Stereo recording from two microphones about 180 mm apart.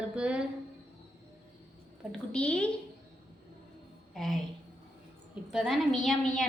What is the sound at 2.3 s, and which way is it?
Speech, 5° left (ahead or behind).